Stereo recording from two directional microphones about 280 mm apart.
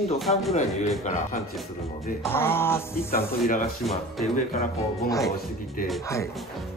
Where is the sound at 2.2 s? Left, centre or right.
Centre.